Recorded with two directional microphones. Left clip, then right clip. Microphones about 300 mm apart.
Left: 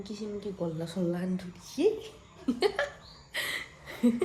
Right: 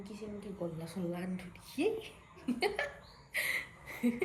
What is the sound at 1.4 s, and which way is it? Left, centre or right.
Speech, centre.